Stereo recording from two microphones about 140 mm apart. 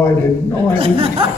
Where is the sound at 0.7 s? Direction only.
40° right (ahead or behind).